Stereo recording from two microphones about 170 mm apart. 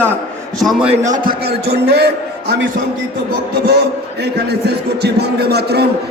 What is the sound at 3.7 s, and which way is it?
A man's voice, 70° right (ahead or behind).